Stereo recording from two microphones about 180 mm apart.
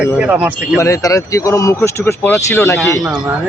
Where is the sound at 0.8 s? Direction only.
20° left (ahead or behind).